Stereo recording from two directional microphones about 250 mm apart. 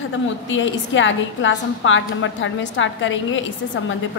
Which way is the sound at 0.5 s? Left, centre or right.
Left.